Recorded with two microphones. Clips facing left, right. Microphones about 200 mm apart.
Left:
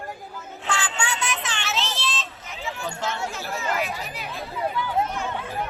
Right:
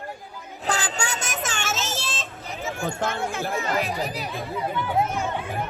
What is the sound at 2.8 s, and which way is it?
Speech, 55° right (ahead or behind).